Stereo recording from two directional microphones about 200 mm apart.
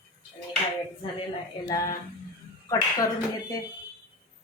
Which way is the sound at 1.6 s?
20° left (ahead or behind).